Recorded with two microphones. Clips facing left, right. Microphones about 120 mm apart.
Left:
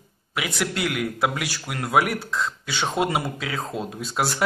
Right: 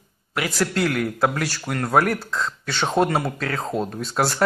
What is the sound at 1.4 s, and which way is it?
Speech, 5° left (ahead or behind).